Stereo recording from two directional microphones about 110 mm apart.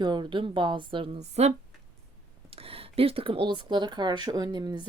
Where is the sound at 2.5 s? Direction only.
60° right (ahead or behind); by 4.9 s 40° right (ahead or behind).